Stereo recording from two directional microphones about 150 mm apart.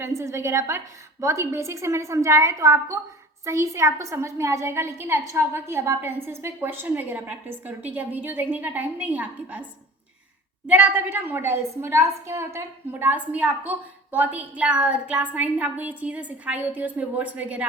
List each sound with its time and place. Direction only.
0.0 s a woman's voice: 20° right (ahead or behind)
10.7 s a woman's voice: 10° right (ahead or behind)